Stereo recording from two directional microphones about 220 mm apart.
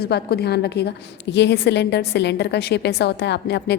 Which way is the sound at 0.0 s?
45° left (ahead or behind).